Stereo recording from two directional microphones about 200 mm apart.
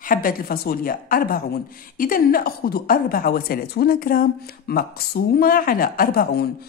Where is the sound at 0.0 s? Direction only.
45° left (ahead or behind).